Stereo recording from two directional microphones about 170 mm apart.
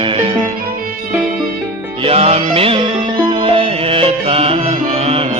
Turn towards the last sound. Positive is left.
turn(degrees=-35)  # may be behind; listen again after turning